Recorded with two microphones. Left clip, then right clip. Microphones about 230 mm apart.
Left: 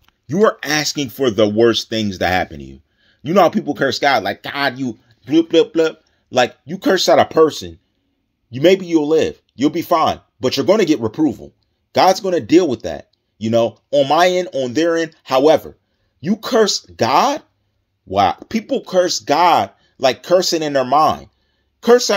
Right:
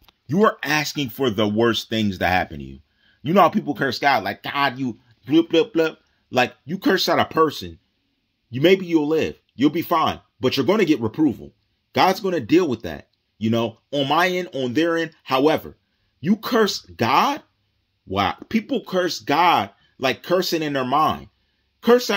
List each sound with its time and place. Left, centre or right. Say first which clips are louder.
0.4 s speech: left 4 dB; centre